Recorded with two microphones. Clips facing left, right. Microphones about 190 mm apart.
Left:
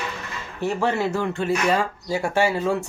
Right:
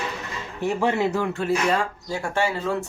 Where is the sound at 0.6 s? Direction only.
15° right (ahead or behind).